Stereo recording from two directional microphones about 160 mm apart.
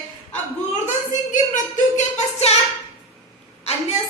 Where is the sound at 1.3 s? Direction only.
50° left (ahead or behind).